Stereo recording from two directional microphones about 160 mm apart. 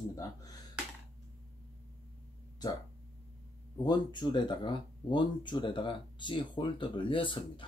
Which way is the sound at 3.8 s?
25° left (ahead or behind).